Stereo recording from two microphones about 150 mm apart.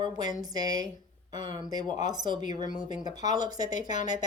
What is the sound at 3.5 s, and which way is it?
Speech, 60° left (ahead or behind).